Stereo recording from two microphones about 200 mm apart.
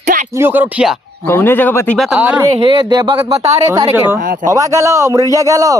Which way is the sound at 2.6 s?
25° right (ahead or behind).